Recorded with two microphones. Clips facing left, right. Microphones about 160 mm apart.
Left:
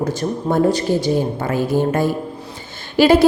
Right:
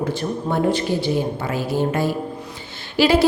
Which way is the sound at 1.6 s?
50° left (ahead or behind).